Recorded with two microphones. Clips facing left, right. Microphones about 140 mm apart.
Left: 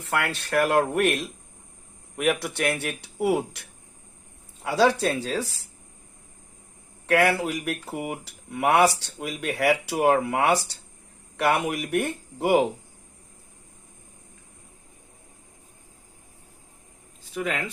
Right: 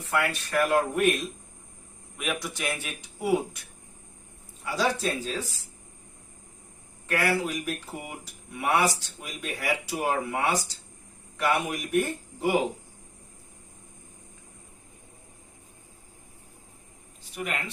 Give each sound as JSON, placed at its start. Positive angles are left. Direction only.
{"t": 0.0, "sound": "speech", "side_deg": 75}
{"t": 4.6, "sound": "speech", "side_deg": 70}
{"t": 7.1, "sound": "speech", "side_deg": 65}